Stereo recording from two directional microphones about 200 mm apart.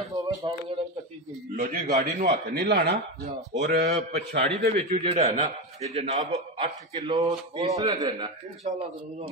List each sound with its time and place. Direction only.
0.2 s a sound: 15° right (ahead or behind)
1.5 s a man's voice: 45° right (ahead or behind)
4.7 s a man's voice: 30° right (ahead or behind)
7.0 s a man's voice: 20° right (ahead or behind)